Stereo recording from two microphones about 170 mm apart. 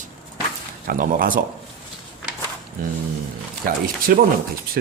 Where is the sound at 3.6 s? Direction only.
55° right (ahead or behind).